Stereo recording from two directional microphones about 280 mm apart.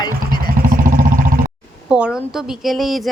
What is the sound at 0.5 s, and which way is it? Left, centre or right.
Vehicle, right.